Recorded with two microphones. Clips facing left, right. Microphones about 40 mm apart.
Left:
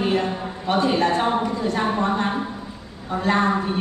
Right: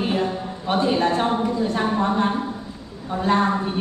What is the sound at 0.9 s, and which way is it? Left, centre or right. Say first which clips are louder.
A woman's voice: even; centre.